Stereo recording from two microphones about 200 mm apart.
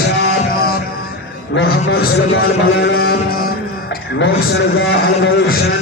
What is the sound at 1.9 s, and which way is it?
A man's voice, 50° left (ahead or behind).